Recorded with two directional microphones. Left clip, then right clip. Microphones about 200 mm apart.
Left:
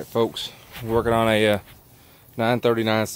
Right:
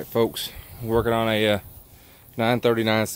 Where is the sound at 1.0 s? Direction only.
20° left (ahead or behind).